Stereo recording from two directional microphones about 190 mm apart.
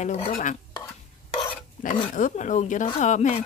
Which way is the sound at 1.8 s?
45° left (ahead or behind).